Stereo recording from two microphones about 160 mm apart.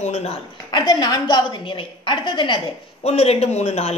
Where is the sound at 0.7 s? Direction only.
25° left (ahead or behind).